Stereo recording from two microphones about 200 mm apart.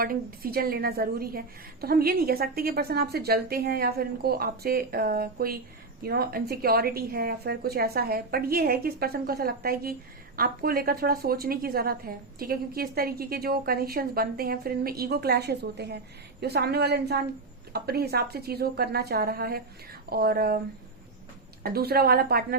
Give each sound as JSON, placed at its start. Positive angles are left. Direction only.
{"t": 0.0, "sound": "a woman's voice", "side_deg": -50}
{"t": 21.6, "sound": "a woman's voice", "side_deg": -50}